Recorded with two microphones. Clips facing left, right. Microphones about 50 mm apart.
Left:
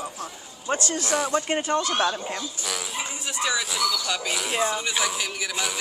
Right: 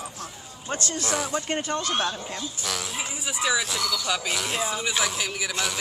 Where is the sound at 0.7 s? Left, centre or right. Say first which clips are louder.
Left 5 dB; left.